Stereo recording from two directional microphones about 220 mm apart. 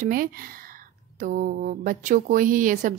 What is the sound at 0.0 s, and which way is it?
A woman's voice, 40° right (ahead or behind).